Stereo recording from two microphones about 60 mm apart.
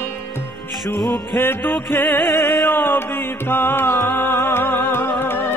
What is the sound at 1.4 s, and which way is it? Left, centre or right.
Music, left.